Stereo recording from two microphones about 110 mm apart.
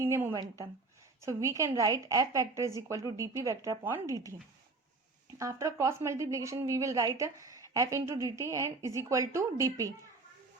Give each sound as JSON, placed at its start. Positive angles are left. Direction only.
{"t": 0.0, "sound": "a woman's voice", "side_deg": -25}
{"t": 5.4, "sound": "a woman's voice", "side_deg": -30}